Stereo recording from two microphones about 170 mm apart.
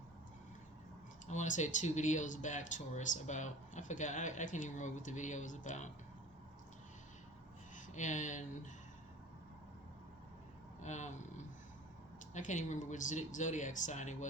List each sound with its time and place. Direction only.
1.3 s speech: 45° left (ahead or behind)
7.9 s speech: 45° left (ahead or behind)
10.8 s a sound: 45° left (ahead or behind)
12.3 s speech: 45° left (ahead or behind)